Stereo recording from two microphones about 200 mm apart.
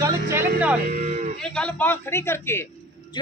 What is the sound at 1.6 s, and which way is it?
Speech, 10° left (ahead or behind).